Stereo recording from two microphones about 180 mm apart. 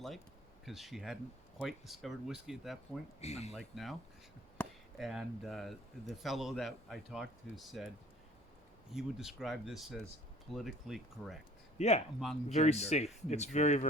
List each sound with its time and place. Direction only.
0.6 s speech: centre (ahead or behind)
3.2 s speech: 35° left (ahead or behind)
3.5 s speech: centre (ahead or behind)
4.9 s speech: centre (ahead or behind)
8.9 s speech: centre (ahead or behind)
11.8 s speech: 35° left (ahead or behind)
12.2 s speech: centre (ahead or behind)
12.5 s speech: 35° left (ahead or behind)